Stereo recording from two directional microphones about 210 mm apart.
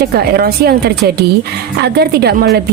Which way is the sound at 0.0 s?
50° right (ahead or behind).